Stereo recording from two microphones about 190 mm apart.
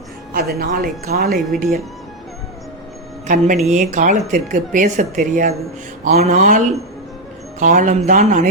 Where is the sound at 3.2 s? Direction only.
40° right (ahead or behind).